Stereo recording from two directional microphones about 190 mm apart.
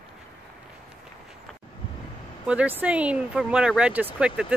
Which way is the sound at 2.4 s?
5° right (ahead or behind).